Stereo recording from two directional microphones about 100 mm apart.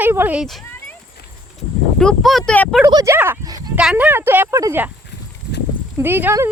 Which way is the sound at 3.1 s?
25° right (ahead or behind).